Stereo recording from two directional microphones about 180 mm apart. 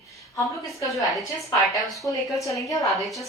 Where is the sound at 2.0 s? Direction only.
15° left (ahead or behind).